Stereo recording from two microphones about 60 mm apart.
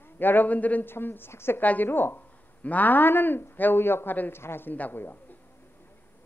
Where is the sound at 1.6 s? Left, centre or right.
Left.